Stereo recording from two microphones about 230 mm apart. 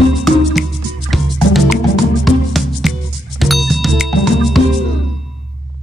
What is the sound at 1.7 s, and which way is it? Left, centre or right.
Music, centre.